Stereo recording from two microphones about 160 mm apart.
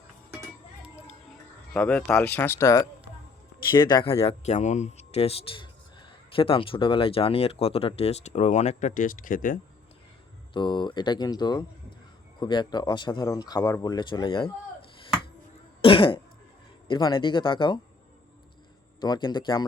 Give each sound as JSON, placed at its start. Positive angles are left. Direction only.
{"t": 1.7, "sound": "speech", "side_deg": 5}
{"t": 10.5, "sound": "speech", "side_deg": 30}
{"t": 15.8, "sound": "cough", "side_deg": 30}
{"t": 16.9, "sound": "speech", "side_deg": 30}
{"t": 18.9, "sound": "speech", "side_deg": 25}